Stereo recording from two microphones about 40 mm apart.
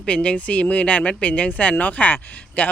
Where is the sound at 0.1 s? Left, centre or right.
Left.